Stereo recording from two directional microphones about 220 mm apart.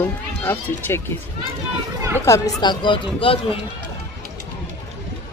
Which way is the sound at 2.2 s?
15° left (ahead or behind).